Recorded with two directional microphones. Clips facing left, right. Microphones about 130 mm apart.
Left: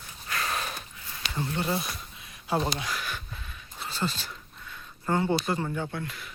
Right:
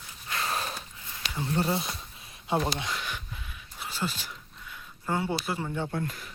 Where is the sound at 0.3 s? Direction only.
25° right (ahead or behind); by 5.7 s 5° right (ahead or behind).